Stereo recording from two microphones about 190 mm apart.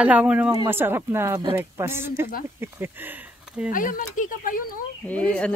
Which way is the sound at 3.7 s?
45° left (ahead or behind).